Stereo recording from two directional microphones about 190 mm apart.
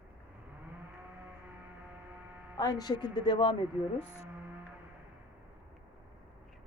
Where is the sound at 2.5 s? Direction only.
20° left (ahead or behind).